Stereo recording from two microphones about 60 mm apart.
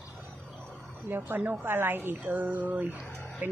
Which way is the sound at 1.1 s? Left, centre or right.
Right.